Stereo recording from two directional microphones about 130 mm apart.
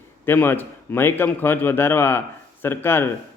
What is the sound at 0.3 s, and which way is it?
A man's voice, 15° left (ahead or behind).